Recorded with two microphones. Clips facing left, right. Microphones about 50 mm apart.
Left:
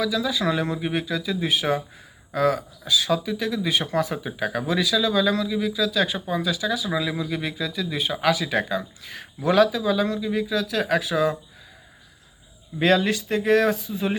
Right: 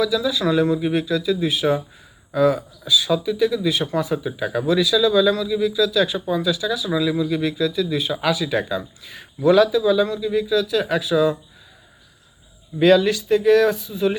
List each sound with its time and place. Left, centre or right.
0.0 s speech: left
1.5 s speech: left
2.3 s speech: left
6.1 s speech: left
6.4 s speech: left
12.8 s speech: left